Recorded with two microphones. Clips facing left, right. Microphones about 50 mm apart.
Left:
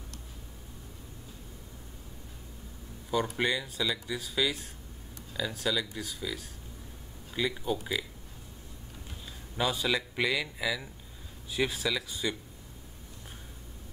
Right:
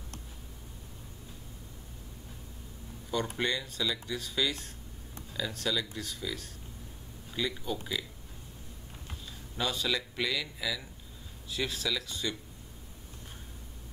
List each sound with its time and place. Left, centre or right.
3.3 s speech: centre
9.6 s speech: centre